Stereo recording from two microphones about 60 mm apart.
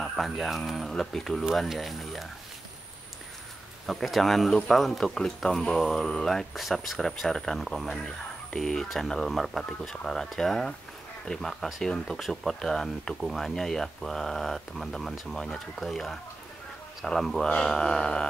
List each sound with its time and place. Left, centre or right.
0.0 s speech: centre
3.8 s speech: centre
8.5 s mantra: centre
8.8 s speech: centre
17.0 s mantra: centre